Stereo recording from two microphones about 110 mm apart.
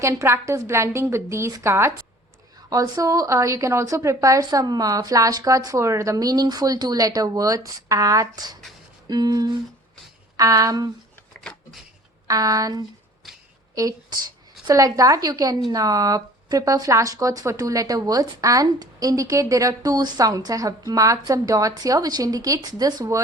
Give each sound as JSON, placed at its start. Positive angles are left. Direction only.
{"t": 0.0, "sound": "a woman's voice", "side_deg": -25}
{"t": 2.6, "sound": "speech", "side_deg": -35}
{"t": 11.3, "sound": "a sound", "side_deg": 5}
{"t": 12.3, "sound": "speech", "side_deg": -30}